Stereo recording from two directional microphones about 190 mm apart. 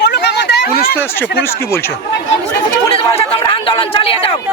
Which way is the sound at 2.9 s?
30° left (ahead or behind).